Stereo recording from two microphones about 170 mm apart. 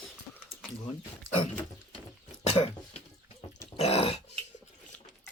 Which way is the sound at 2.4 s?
40° left (ahead or behind).